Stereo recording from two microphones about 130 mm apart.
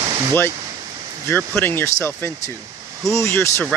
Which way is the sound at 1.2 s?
20° left (ahead or behind).